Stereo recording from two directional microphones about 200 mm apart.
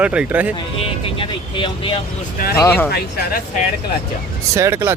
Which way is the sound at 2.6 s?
10° left (ahead or behind).